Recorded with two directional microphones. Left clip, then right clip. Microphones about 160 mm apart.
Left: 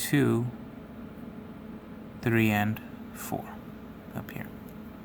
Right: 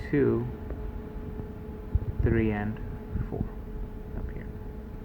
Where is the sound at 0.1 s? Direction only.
90° left.